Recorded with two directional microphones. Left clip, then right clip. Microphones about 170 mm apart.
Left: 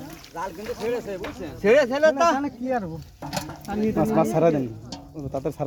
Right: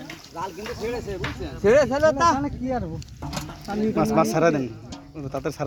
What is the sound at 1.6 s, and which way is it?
Speech, 35° right (ahead or behind).